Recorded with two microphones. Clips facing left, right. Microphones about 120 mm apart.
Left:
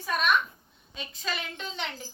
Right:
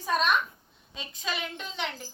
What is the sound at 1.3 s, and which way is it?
Speech, 10° right (ahead or behind).